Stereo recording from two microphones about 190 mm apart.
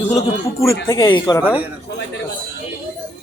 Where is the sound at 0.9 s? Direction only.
20° left (ahead or behind).